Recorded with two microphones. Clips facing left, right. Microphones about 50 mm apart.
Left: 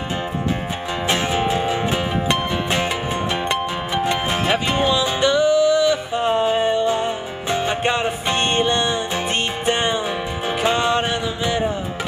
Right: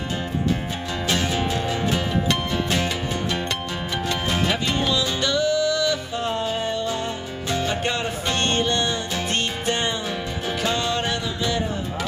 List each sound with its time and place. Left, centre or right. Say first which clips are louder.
1.0 s music: left 4 dB; left